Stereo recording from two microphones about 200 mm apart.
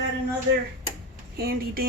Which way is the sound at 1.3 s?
50° right (ahead or behind).